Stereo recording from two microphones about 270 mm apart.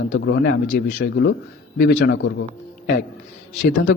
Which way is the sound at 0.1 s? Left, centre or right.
Left.